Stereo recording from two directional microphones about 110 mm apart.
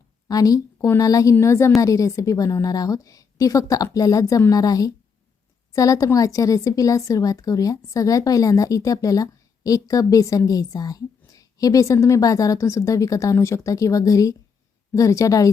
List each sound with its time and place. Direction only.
0.3 s a woman's voice: 35° left (ahead or behind)